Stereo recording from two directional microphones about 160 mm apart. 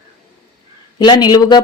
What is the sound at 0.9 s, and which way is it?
Speech, 30° left (ahead or behind).